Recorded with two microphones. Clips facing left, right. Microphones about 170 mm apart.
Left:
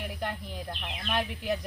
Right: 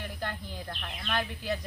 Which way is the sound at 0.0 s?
10° left (ahead or behind).